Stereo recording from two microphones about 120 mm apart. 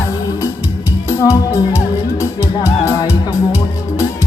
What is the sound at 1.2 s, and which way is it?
Music, 25° left (ahead or behind).